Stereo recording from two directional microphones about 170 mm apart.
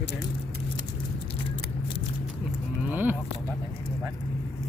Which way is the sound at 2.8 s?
10° right (ahead or behind).